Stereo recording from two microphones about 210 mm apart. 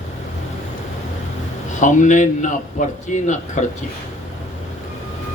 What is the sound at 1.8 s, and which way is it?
A man's voice, 35° left (ahead or behind).